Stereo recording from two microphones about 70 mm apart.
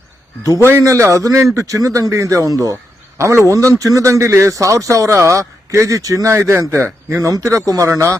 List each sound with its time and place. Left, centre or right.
0.8 s a man's voice: right
3.2 s a man's voice: right